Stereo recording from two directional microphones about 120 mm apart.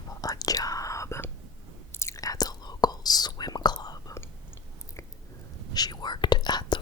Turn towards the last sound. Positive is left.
turn(degrees=35)  # may be behind; listen again after turning